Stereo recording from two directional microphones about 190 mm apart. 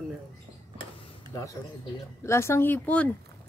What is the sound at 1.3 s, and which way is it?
Speech, 15° left (ahead or behind).